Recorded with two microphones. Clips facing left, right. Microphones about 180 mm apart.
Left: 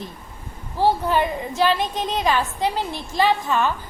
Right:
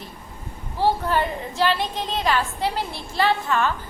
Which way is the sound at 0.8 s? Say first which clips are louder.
Left 2 dB; 15° left (ahead or behind).